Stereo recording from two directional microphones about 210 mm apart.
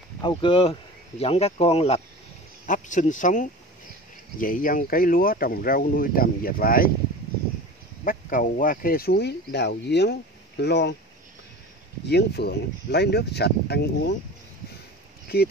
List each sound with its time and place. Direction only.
0.2 s speech: 25° left (ahead or behind); by 6.9 s 45° left (ahead or behind)
8.0 s speech: 40° left (ahead or behind)
12.1 s speech: 50° left (ahead or behind)